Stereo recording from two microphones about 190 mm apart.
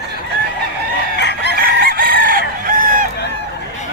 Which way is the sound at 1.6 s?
50° right (ahead or behind).